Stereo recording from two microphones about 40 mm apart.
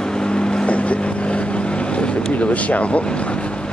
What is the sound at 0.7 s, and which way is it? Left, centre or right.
Vehicle, left.